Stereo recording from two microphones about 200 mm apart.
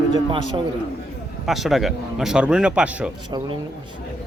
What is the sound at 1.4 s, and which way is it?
Speech, centre (ahead or behind).